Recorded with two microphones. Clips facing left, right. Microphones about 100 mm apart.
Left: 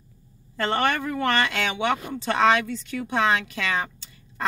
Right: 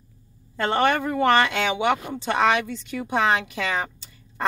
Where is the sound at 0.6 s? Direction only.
20° right (ahead or behind).